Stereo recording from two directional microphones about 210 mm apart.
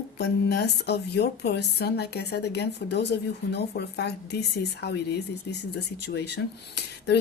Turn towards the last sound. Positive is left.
turn(degrees=55)  # may be behind; listen again after turning